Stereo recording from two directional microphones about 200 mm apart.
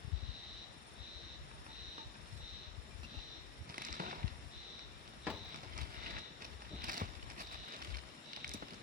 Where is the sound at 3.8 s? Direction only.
45° right (ahead or behind).